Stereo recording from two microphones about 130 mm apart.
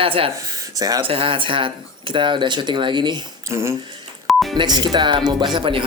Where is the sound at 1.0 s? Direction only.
45° right (ahead or behind).